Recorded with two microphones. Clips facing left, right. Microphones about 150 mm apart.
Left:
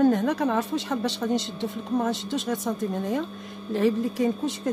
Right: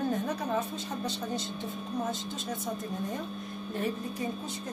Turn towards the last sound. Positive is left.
turn(degrees=90)